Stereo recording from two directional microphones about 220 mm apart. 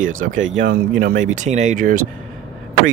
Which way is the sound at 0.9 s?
40° right (ahead or behind).